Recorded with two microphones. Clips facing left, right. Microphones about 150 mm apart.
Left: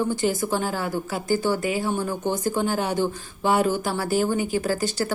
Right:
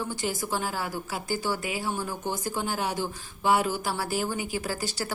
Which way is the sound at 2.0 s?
25° left (ahead or behind).